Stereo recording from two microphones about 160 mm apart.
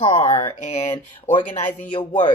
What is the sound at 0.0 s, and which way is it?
Speech, 40° left (ahead or behind).